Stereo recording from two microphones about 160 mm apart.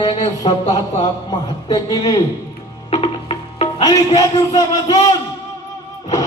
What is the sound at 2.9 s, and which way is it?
Music, 35° left (ahead or behind).